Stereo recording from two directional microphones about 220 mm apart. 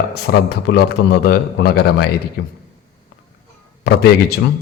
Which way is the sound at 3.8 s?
45° left (ahead or behind).